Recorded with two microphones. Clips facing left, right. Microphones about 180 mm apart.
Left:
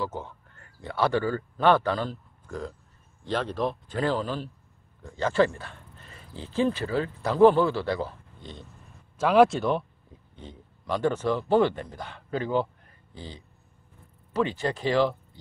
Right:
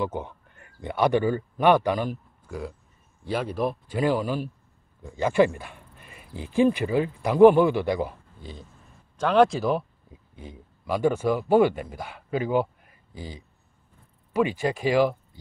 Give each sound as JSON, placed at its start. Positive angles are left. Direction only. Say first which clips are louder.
{"t": 0.0, "sound": "speech", "louder": "right 3 dB", "side_deg": -15}
{"t": 9.2, "sound": "speech", "louder": "even", "side_deg": 5}